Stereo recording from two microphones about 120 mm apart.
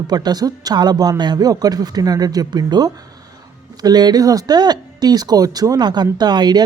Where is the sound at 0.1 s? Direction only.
35° right (ahead or behind).